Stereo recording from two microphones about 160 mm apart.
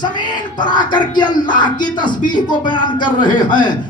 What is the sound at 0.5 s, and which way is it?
Speech, 30° left (ahead or behind).